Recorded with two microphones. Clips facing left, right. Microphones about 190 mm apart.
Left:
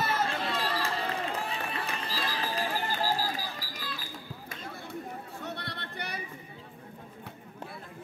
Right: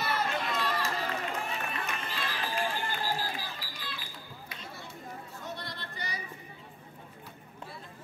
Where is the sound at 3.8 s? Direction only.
40° left (ahead or behind).